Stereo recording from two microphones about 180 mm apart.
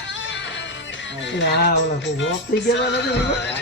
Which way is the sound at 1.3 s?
75° left (ahead or behind).